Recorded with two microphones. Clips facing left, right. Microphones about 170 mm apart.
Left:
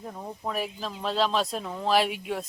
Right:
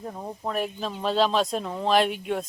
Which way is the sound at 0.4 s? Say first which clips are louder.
Right 3 dB; 5° left (ahead or behind).